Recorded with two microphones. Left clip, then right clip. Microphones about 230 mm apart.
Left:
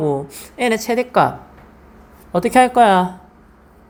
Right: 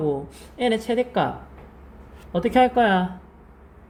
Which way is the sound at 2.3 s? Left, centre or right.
Left.